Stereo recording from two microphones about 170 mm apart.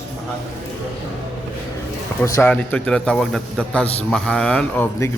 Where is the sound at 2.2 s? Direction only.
20° left (ahead or behind).